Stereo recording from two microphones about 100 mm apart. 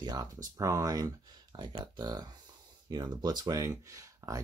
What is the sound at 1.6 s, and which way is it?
Speech, 50° right (ahead or behind).